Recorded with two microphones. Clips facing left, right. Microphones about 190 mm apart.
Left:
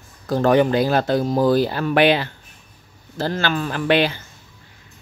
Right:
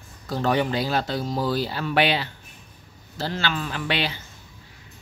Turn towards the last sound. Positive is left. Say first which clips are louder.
# left 9 dB
turn(degrees=50)  # may be behind; listen again after turning